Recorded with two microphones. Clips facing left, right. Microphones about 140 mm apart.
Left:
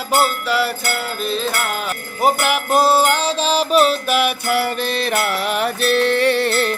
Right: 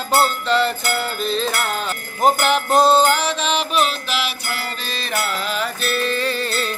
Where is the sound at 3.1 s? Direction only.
30° left (ahead or behind); by 6.7 s 70° left (ahead or behind).